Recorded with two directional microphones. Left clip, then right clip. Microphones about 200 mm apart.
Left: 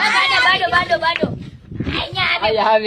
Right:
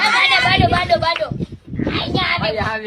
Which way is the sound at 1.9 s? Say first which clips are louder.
Left 1 dB; 15° left (ahead or behind).